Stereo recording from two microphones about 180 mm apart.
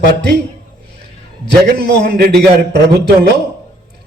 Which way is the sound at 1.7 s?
60° right (ahead or behind).